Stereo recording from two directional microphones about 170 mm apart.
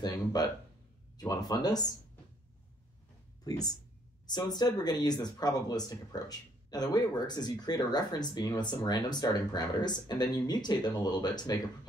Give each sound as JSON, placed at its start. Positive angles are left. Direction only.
{"t": 0.0, "sound": "a sound", "side_deg": 25}
{"t": 1.1, "sound": "speech", "side_deg": 20}
{"t": 3.4, "sound": "speech", "side_deg": 20}